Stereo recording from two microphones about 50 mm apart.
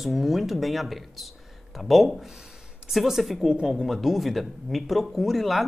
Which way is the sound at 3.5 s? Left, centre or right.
Centre.